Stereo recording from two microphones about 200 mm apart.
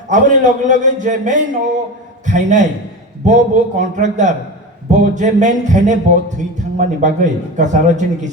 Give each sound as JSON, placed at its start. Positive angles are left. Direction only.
{"t": 0.1, "sound": "speech", "side_deg": -40}